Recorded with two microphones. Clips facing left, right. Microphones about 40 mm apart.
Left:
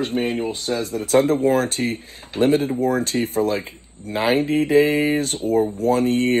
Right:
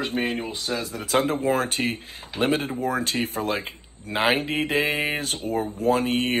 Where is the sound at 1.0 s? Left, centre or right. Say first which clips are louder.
Left 7 dB; right.